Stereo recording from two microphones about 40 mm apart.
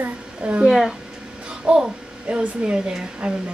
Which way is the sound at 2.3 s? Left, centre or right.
Right.